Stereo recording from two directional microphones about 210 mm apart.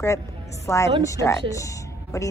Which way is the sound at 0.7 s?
15° left (ahead or behind).